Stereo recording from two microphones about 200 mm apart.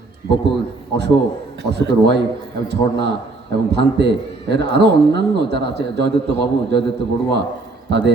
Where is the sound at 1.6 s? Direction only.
60° right (ahead or behind).